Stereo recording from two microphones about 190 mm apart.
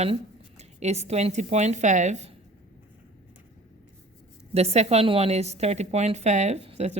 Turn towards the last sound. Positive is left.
turn(degrees=-35)  # may be behind; listen again after turning